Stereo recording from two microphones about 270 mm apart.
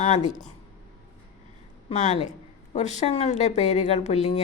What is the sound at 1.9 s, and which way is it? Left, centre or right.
Speech, left.